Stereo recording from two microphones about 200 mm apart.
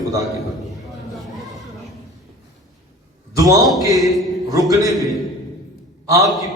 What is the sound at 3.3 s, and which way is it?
Speech, 15° right (ahead or behind).